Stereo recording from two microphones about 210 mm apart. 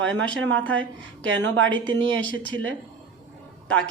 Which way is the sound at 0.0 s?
65° right (ahead or behind).